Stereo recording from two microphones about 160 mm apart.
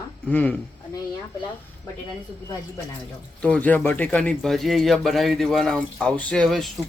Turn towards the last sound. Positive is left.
turn(degrees=0)  # may be behind; listen again after turning